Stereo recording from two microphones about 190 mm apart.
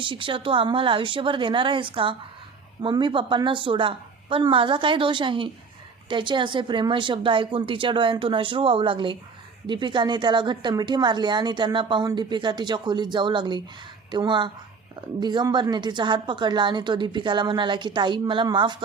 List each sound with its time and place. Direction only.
0.0 s a woman's voice: 25° right (ahead or behind)